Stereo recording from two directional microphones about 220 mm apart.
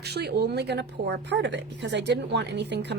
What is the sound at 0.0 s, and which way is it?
A woman's voice, 50° right (ahead or behind).